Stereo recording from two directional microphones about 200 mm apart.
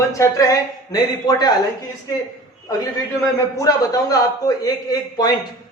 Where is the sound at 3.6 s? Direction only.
15° left (ahead or behind).